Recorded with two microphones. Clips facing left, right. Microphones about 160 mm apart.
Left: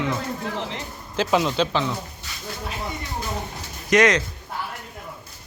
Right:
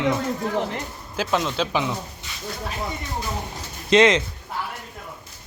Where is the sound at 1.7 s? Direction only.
15° right (ahead or behind).